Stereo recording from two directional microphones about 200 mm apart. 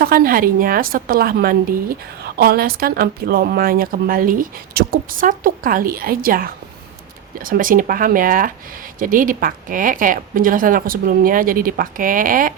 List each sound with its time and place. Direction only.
0.0 s speech: 45° right (ahead or behind)